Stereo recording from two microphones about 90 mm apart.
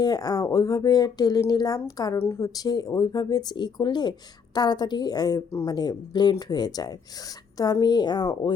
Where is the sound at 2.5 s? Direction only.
45° left (ahead or behind).